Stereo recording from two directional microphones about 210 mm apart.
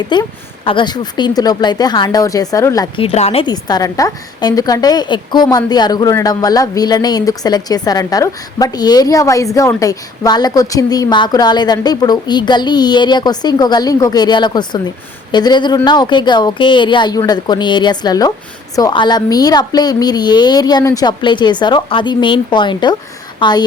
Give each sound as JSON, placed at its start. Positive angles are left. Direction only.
{"t": 0.1, "sound": "a woman's voice", "side_deg": 25}